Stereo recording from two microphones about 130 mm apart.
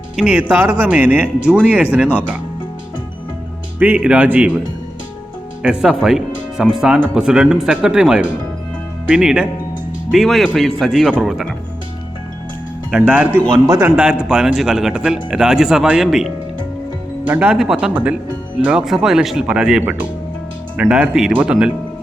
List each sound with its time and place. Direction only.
0.2 s speech: 10° right (ahead or behind)
3.8 s speech: 10° right (ahead or behind)
5.6 s speech: 5° right (ahead or behind)
12.9 s a man's voice: 10° right (ahead or behind)
13.9 s speech: 5° right (ahead or behind)
17.2 s speech: 15° right (ahead or behind)
17.5 s speech: centre (ahead or behind)